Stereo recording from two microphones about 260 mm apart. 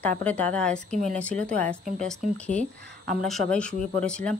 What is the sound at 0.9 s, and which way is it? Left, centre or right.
Speech, right.